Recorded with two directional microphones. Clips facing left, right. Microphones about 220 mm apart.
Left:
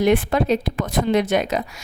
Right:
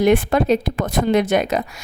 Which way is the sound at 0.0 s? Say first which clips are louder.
Right 2 dB; 50° right (ahead or behind).